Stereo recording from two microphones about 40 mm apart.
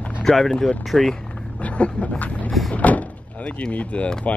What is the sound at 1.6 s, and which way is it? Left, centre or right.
Dog, left.